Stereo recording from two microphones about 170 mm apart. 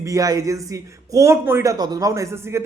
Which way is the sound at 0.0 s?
20° right (ahead or behind).